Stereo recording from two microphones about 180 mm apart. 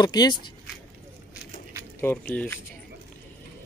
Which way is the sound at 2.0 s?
10° left (ahead or behind).